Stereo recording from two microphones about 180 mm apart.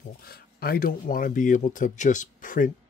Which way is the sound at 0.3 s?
60° left (ahead or behind).